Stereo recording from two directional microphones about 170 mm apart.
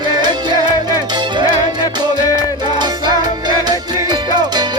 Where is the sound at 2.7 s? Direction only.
25° right (ahead or behind).